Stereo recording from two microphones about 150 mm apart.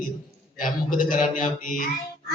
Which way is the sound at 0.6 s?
65° left (ahead or behind).